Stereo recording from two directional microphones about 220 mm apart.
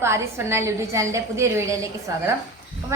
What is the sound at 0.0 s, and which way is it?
A woman's voice, 10° right (ahead or behind).